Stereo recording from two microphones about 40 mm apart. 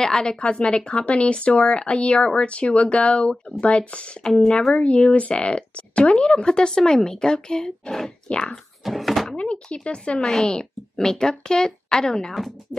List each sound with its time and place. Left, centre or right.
0.0 s a woman's voice: centre
4.5 s a woman's voice: centre
4.7 s a woman's voice: left
8.8 s speech: centre
9.4 s a woman's voice: left
10.2 s a woman's voice: centre